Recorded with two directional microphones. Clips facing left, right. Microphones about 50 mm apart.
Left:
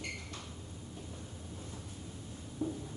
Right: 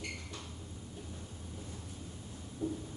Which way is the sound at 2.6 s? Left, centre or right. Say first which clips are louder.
Even; centre.